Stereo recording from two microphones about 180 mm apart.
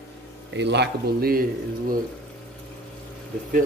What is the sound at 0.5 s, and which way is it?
Speech, 70° right (ahead or behind).